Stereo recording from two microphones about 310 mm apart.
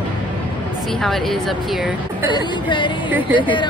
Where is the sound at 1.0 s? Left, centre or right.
Centre.